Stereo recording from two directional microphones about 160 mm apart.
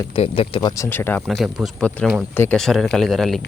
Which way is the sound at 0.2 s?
35° left (ahead or behind).